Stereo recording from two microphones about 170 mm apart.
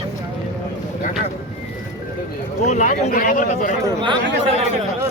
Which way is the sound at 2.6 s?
45° left (ahead or behind).